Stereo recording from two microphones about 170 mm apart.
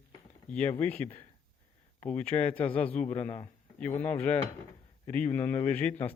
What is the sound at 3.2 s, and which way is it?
Speech, 30° left (ahead or behind).